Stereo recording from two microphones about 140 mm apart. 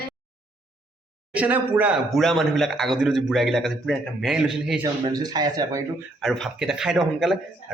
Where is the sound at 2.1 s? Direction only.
Centre (ahead or behind).